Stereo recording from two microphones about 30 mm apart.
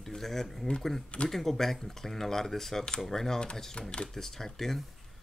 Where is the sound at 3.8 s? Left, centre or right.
Left.